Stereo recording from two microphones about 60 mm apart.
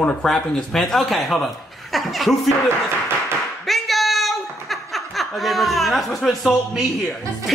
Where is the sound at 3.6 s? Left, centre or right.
Centre.